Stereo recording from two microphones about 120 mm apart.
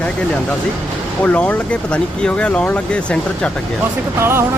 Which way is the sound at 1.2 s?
10° left (ahead or behind).